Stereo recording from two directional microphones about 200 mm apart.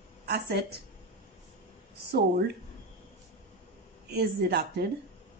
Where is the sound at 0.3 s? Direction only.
55° right (ahead or behind).